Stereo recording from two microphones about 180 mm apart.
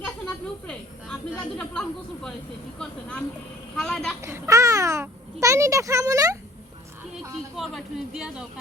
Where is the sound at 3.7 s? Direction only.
5° left (ahead or behind).